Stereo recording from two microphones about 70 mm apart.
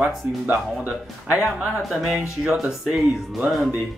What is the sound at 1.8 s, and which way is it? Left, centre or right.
Speech, centre.